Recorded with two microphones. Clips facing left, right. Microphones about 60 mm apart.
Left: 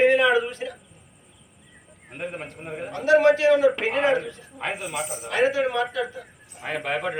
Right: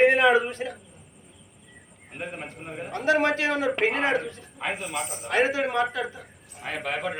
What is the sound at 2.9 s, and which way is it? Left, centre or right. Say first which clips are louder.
A man's voice: left 5 dB; right.